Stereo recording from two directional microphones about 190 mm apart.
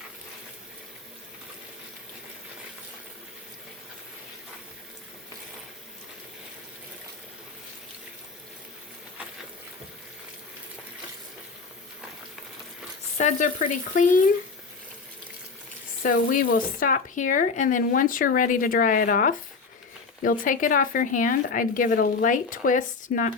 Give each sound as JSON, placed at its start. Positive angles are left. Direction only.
{"t": 13.1, "sound": "frying", "side_deg": 40}
{"t": 16.0, "sound": "speech", "side_deg": 45}